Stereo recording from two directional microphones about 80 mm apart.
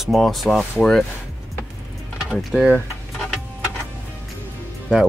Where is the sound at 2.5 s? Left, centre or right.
Centre.